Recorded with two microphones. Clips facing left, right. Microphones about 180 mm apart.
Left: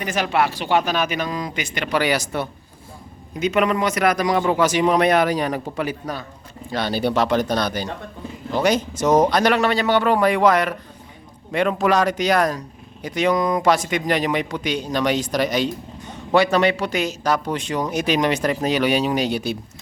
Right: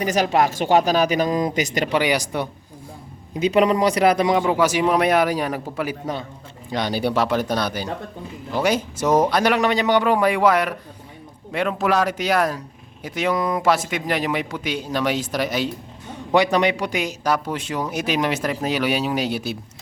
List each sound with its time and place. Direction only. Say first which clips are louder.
0.0 s speech: right 2 dB; 40° right (ahead or behind)
1.9 s a man's voice: even; 15° right (ahead or behind)
3.4 s speech: right 2 dB; 30° right (ahead or behind)
4.4 s a man's voice: even; 10° right (ahead or behind)
6.7 s a man's voice: left 1 dB; 15° right (ahead or behind)
16.3 s speech: left 1 dB; 15° right (ahead or behind)